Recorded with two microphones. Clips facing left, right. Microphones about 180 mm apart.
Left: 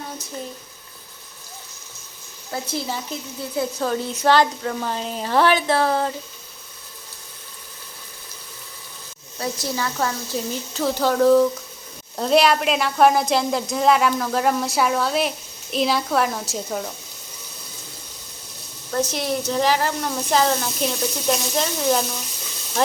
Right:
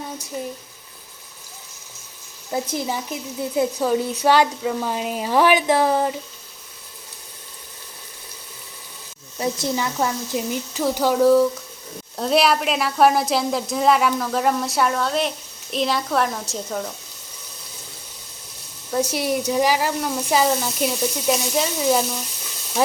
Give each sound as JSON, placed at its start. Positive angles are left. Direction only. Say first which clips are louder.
{"t": 2.5, "sound": "speech", "louder": "right 3 dB", "side_deg": -15}
{"t": 9.4, "sound": "a woman's voice", "louder": "right 3 dB", "side_deg": -20}
{"t": 18.9, "sound": "speech", "louder": "right 2 dB", "side_deg": -10}